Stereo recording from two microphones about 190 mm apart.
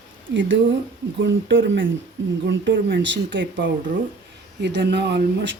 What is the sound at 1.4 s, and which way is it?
Speech, 80° right.